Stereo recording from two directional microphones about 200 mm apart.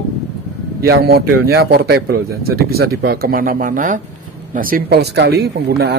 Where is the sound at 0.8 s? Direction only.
50° right (ahead or behind).